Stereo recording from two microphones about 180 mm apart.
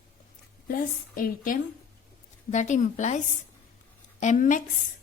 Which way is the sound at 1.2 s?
50° left (ahead or behind).